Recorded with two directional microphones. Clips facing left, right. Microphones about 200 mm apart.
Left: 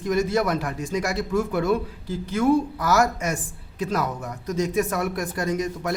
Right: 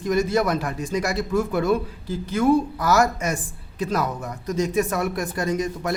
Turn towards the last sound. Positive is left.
turn(degrees=-30)  # may be behind; listen again after turning